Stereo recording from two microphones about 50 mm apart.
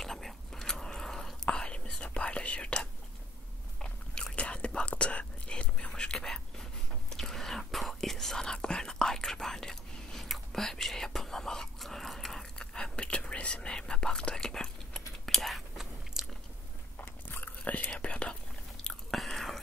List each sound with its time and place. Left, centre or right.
0.0 s whispering: centre; by 2.8 s left
3.8 s biting: centre
4.4 s whispering: left; by 12.6 s centre
12.7 s whispering: centre
16.1 s biting: centre
17.3 s whispering: left
18.9 s biting: centre